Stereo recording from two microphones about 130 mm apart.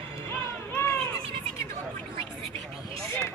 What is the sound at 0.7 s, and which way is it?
Run, 15° left (ahead or behind).